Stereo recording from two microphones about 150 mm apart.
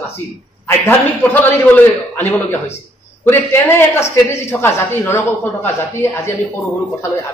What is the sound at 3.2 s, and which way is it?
A woman's voice, 15° left (ahead or behind).